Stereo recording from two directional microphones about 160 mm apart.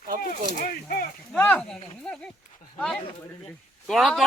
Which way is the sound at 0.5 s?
65° left (ahead or behind).